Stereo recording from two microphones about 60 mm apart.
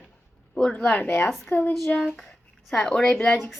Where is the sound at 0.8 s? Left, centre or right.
Left.